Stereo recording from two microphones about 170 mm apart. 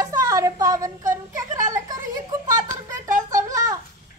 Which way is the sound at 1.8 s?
20° right (ahead or behind).